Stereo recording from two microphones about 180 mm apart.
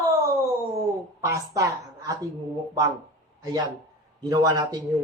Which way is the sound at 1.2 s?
20° right (ahead or behind).